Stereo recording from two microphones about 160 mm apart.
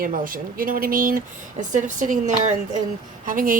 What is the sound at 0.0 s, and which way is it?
Speech, 60° right (ahead or behind).